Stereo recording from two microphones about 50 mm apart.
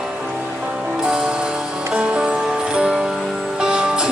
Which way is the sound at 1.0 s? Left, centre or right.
Centre.